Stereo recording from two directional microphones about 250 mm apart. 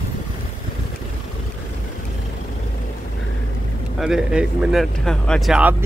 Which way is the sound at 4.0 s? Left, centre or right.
Centre.